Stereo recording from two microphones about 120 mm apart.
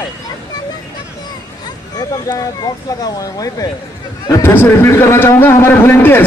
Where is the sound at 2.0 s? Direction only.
35° left (ahead or behind).